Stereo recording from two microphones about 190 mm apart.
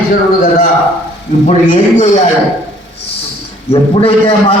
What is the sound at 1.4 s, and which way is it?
Speech, 40° left (ahead or behind).